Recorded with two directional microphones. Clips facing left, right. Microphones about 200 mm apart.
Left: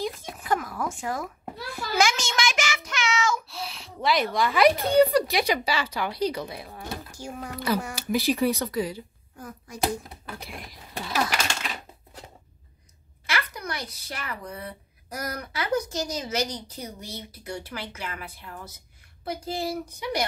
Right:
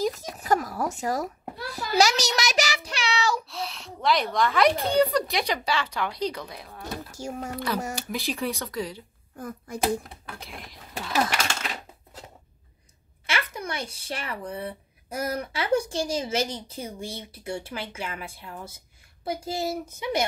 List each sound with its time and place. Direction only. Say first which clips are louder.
0.0 s a sound: right 4 dB; 40° right (ahead or behind)
1.7 s child singing: right 2 dB; 40° right (ahead or behind)
3.4 s speech: right 3 dB; centre (ahead or behind)
7.1 s speech: right 3 dB; 40° right (ahead or behind)
7.5 s speech: left 4 dB; 5° left (ahead or behind)
9.4 s speech: right 5 dB; 55° right (ahead or behind)
10.2 s speech: left 2 dB; centre (ahead or behind)
13.3 s speech: right 1 dB; 25° right (ahead or behind)